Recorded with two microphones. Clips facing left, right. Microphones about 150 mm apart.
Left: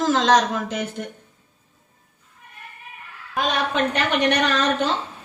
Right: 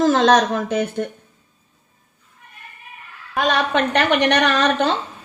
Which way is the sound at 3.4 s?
65° right (ahead or behind).